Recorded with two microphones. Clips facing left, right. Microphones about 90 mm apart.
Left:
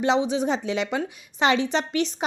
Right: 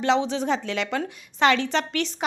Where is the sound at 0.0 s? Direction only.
15° left (ahead or behind).